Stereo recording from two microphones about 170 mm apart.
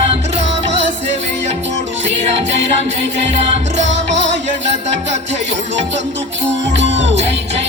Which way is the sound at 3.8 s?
90° right.